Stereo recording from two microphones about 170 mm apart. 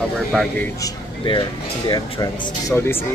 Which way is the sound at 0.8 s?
25° left (ahead or behind).